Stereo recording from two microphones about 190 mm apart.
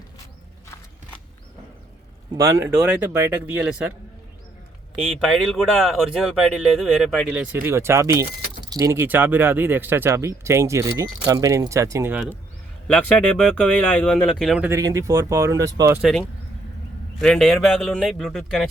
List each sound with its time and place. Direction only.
2.3 s speech: 15° right (ahead or behind)
5.2 s speech: 5° left (ahead or behind)
7.3 s speech: 10° right (ahead or behind)
12.9 s speech: 5° left (ahead or behind)
14.7 s speech: 15° right (ahead or behind)
16.0 s speech: centre (ahead or behind)